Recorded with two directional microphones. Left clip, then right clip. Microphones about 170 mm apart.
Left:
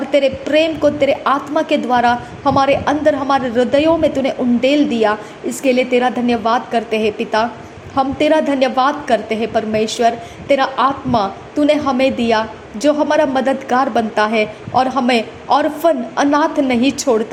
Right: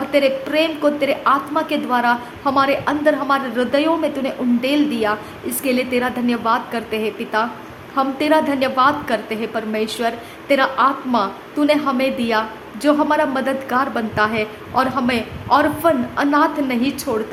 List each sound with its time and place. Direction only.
0.1 s a woman's voice: 15° left (ahead or behind)